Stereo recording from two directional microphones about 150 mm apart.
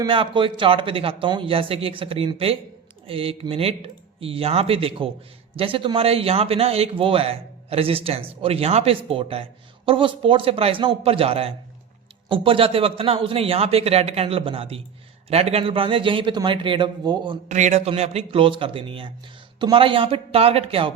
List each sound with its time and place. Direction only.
0.0 s a man's voice: 35° right (ahead or behind)
17.5 s a man's voice: 50° right (ahead or behind)